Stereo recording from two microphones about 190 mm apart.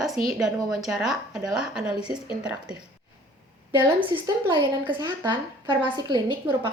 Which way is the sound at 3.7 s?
25° right (ahead or behind).